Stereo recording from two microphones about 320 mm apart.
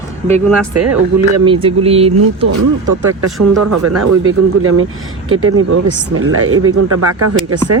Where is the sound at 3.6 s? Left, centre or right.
Right.